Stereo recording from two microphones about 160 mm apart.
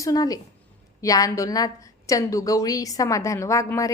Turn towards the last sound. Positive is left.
turn(degrees=20)  # may be behind; listen again after turning